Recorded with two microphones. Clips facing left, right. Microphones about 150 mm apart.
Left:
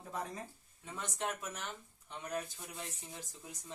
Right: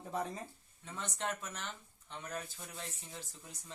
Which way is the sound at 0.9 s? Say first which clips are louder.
Even; 10° left (ahead or behind).